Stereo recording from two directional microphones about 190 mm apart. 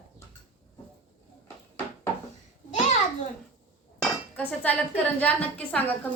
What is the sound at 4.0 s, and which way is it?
Speech, 5° left (ahead or behind).